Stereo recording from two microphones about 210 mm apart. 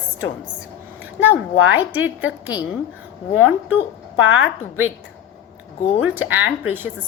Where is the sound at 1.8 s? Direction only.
10° right (ahead or behind).